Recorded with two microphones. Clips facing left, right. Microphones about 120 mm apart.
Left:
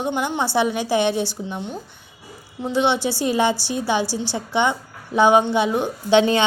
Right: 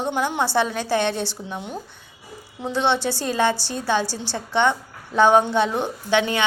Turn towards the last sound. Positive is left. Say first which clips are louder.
# left 5 dB
turn(degrees=25)  # may be behind; listen again after turning